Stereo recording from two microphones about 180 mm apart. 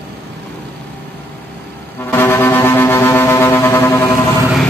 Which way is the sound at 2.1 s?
15° left (ahead or behind).